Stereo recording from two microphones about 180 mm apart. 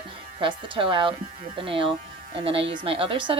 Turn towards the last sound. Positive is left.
turn(degrees=-30)  # may be behind; listen again after turning